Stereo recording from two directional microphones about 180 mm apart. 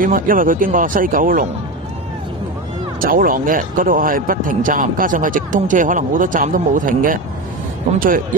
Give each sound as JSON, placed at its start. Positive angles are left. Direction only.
{"t": 0.0, "sound": "speech", "side_deg": -50}
{"t": 3.0, "sound": "speech", "side_deg": -50}